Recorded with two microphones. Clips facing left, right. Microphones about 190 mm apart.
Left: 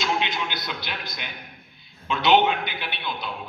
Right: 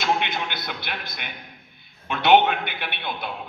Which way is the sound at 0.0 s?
55° right (ahead or behind).